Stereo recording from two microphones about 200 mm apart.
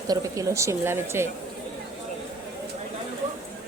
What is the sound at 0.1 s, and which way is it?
Speech, 15° right (ahead or behind).